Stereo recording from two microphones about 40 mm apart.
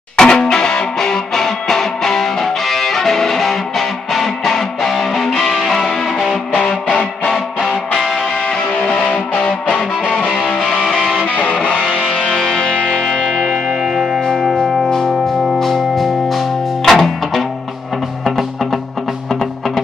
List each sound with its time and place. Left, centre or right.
0.2 s music: centre
7.2 s music: centre
8.5 s music: centre
9.1 s music: left
10.6 s music: centre
11.1 s music: left
11.8 s music: centre
13.7 s music: centre
14.2 s music: centre